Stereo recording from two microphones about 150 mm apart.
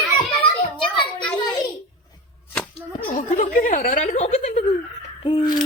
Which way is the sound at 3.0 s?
65° left (ahead or behind).